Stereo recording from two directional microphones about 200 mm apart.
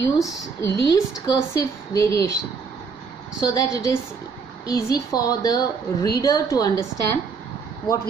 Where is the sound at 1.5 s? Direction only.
15° left (ahead or behind).